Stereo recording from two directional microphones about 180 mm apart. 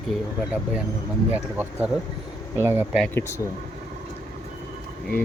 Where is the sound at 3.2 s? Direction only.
15° left (ahead or behind).